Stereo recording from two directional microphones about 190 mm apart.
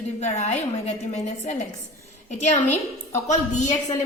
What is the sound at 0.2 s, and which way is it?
A woman's voice, 35° left (ahead or behind).